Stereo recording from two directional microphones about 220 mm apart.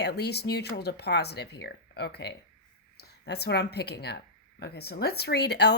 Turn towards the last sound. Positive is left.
turn(degrees=50)  # may be behind; listen again after turning